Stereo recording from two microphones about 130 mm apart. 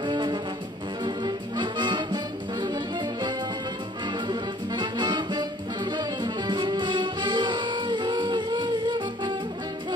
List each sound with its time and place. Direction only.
0.0 s music: 35° right (ahead or behind)